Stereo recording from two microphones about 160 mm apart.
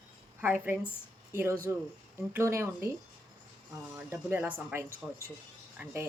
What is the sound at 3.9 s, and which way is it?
Speech, 10° right (ahead or behind).